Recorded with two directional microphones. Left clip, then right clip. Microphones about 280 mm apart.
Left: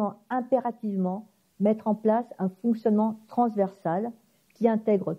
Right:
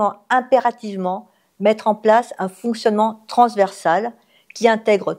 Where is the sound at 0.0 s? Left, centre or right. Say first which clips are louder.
Right 12 dB; centre.